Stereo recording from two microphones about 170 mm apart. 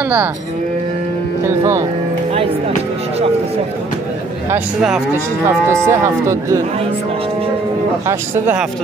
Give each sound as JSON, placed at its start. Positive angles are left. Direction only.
{"t": 5.7, "sound": "speech", "side_deg": -15}